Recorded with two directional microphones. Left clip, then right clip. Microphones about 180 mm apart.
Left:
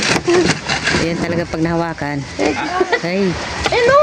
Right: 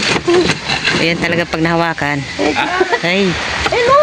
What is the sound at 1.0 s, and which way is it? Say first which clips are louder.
Speech: right 5 dB; centre (ahead or behind).